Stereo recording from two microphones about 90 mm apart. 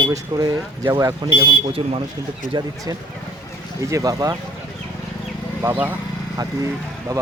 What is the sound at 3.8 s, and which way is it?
Speech, 40° right (ahead or behind).